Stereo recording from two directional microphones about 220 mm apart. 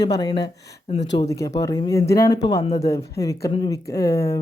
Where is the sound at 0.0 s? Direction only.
20° left (ahead or behind).